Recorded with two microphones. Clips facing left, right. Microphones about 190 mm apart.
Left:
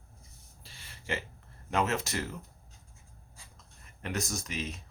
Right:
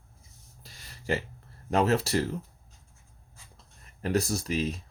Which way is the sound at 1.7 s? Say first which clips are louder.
Right 6 dB; 35° right (ahead or behind).